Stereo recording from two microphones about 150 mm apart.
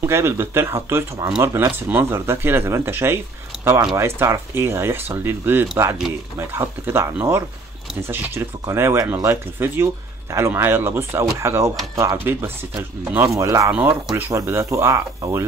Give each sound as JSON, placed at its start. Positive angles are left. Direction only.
{"t": 0.0, "sound": "speech", "side_deg": -15}